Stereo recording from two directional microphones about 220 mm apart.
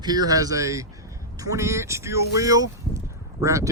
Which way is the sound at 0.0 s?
20° right (ahead or behind).